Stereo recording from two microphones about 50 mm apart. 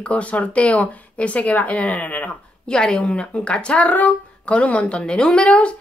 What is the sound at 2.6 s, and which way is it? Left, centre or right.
Speech, centre.